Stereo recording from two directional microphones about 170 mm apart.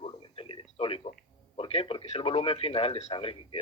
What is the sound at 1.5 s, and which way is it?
A man's voice, 35° left (ahead or behind).